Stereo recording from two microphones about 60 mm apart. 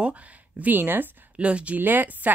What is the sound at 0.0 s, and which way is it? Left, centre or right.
Speech, right.